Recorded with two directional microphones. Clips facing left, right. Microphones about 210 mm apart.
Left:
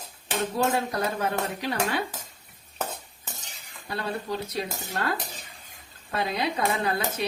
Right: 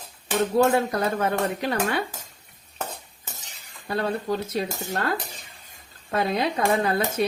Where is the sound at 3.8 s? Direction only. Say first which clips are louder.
Right 5 dB; 50° right (ahead or behind).